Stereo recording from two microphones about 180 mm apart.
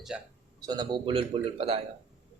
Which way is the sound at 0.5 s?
20° right (ahead or behind).